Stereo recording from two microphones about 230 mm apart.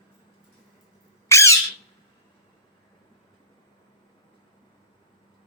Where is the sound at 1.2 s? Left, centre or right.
Centre.